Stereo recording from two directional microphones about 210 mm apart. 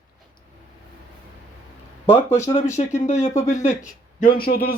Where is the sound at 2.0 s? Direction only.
15° left (ahead or behind).